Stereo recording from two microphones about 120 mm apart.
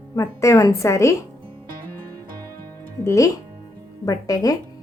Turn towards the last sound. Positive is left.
turn(degrees=30)  # may be behind; listen again after turning